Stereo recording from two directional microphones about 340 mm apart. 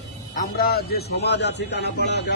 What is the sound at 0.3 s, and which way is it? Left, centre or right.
A man's voice, left.